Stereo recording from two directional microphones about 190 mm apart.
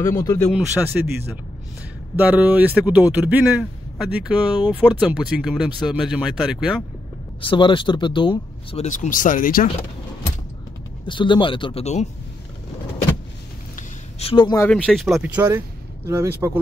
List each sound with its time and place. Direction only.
0.0 s speech: 15° left (ahead or behind)
0.5 s speech: 5° right (ahead or behind)
7.4 s speech: 25° left (ahead or behind)
8.8 s speech: 40° left (ahead or behind)
11.1 s speech: 25° left (ahead or behind)
14.3 s speech: 20° left (ahead or behind)
14.7 s speech: 5° left (ahead or behind); by 16.5 s 15° right (ahead or behind)